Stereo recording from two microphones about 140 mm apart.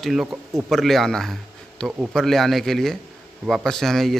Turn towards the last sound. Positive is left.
turn(degrees=0)  # may be behind; listen again after turning